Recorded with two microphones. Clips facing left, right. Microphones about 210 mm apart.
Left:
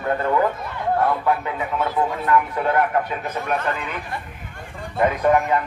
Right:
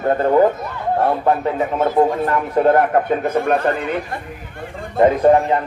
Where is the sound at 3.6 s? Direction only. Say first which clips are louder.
Right 7 dB; 35° right (ahead or behind).